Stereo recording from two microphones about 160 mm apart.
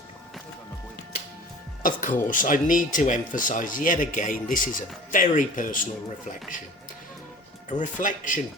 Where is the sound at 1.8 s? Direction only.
55° left (ahead or behind).